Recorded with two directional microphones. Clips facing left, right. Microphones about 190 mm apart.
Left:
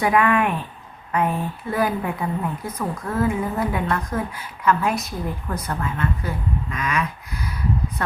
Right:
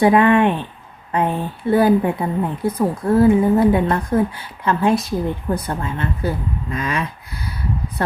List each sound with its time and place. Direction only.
0.0 s a woman's voice: 30° right (ahead or behind)